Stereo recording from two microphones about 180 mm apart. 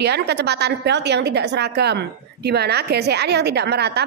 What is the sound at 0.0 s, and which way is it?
A woman's voice, 70° right (ahead or behind).